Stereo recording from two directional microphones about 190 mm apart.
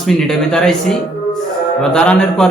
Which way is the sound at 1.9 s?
5° left (ahead or behind).